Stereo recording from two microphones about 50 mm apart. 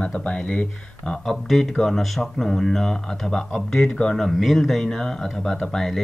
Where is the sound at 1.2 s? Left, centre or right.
Centre.